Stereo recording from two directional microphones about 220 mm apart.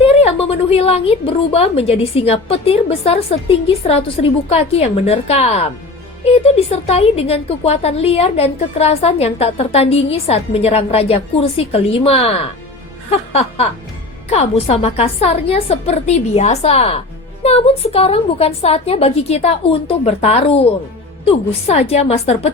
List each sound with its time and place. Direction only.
0.0 s a woman's voice: 25° left (ahead or behind)